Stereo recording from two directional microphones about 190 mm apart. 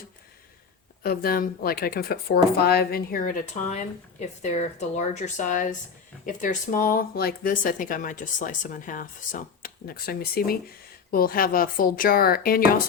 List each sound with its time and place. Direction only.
1.0 s speech: 50° left (ahead or behind)